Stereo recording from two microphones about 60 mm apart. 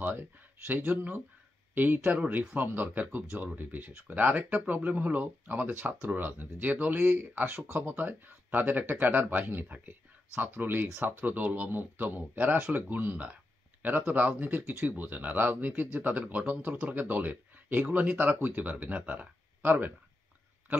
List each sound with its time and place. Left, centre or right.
0.0 s speech: right